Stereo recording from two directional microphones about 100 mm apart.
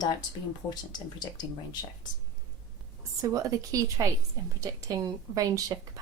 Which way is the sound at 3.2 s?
35° right (ahead or behind).